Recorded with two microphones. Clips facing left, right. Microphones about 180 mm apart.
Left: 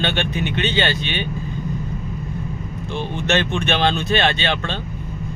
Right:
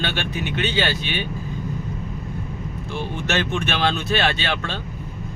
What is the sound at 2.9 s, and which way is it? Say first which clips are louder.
Speech: left 4 dB; 5° right (ahead or behind).